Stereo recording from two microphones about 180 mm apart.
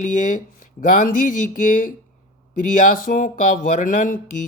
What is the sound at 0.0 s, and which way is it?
Speech, 45° left (ahead or behind).